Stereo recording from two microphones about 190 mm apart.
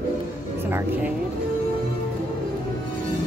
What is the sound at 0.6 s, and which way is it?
Music, 10° right (ahead or behind).